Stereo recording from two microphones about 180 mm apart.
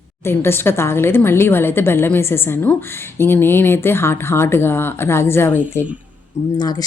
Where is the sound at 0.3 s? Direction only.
15° left (ahead or behind).